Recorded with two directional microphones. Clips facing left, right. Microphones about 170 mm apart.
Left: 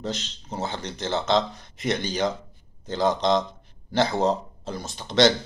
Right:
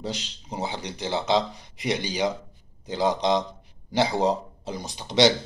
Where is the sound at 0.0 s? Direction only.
10° right (ahead or behind).